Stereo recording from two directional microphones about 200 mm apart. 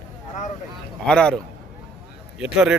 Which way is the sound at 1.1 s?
5° left (ahead or behind).